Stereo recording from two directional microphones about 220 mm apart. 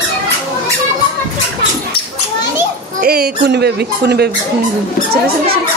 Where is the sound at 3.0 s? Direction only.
40° right (ahead or behind).